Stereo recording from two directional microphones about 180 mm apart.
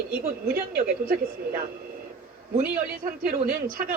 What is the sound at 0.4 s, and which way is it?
Speech, 55° right (ahead or behind).